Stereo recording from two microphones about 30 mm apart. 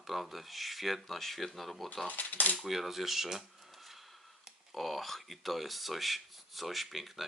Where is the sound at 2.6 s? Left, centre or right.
Centre.